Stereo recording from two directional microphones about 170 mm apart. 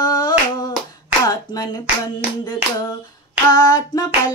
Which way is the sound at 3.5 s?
20° left (ahead or behind).